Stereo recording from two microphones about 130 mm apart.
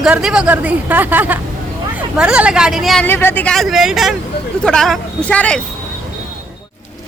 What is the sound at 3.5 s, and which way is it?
A woman's voice, centre (ahead or behind).